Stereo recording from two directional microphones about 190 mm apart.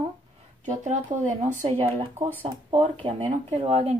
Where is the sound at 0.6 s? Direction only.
40° right (ahead or behind).